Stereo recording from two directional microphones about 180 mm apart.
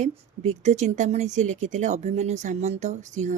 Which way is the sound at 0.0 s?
40° right (ahead or behind).